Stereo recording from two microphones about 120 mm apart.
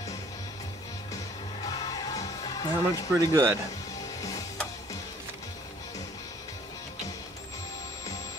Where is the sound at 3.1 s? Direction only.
25° right (ahead or behind).